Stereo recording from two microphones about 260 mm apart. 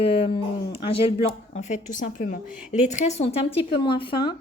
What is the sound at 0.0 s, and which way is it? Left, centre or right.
A woman's voice, left.